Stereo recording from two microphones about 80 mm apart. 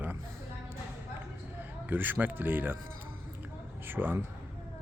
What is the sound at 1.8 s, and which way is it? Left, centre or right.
Speech, right.